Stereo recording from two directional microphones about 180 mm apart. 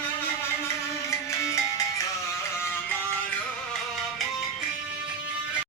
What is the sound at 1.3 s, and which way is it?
Music, 20° left (ahead or behind).